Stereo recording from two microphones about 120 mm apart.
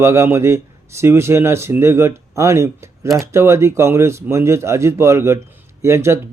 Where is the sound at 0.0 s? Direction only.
25° right (ahead or behind).